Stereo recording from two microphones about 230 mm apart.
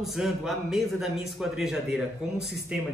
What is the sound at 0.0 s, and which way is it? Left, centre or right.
A man's voice, centre.